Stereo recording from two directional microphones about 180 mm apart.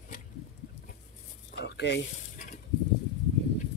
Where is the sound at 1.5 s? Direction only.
65° left (ahead or behind).